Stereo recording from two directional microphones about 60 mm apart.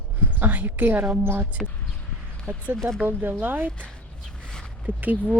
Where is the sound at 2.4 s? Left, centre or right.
Right.